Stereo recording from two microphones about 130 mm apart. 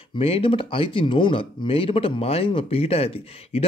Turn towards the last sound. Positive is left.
turn(degrees=50)  # may be behind; listen again after turning